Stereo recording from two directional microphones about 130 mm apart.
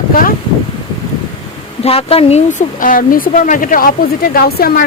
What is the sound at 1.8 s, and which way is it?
Speech, 50° left (ahead or behind).